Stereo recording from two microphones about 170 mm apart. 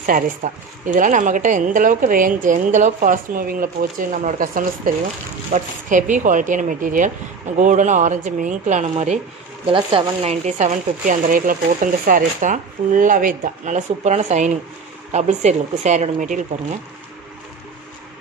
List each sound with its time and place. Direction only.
0.0 s a woman's voice: 50° right (ahead or behind)
9.7 s a woman's voice: 30° right (ahead or behind); by 16.3 s 45° right (ahead or behind)